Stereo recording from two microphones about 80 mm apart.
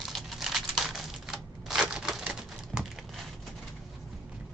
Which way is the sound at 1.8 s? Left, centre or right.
Centre.